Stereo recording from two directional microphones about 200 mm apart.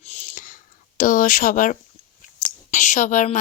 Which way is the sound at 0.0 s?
35° left (ahead or behind).